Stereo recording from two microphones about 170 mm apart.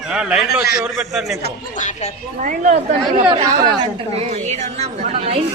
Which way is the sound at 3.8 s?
40° right (ahead or behind).